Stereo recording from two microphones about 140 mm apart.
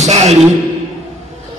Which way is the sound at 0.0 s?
55° right (ahead or behind).